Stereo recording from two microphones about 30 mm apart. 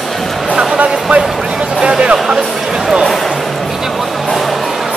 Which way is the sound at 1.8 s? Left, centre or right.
Right.